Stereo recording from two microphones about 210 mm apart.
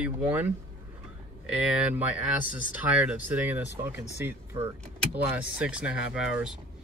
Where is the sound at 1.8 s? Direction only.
5° right (ahead or behind).